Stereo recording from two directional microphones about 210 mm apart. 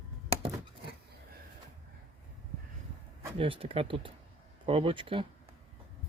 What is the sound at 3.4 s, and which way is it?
Speech, 25° right (ahead or behind).